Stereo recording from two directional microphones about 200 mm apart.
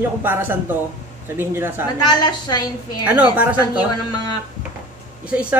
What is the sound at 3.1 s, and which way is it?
Speech, 10° right (ahead or behind).